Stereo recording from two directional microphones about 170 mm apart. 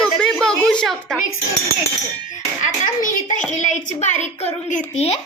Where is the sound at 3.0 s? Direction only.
50° left (ahead or behind).